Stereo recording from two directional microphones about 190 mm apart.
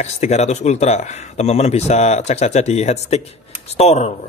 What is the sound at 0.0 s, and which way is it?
Speech, 35° left (ahead or behind).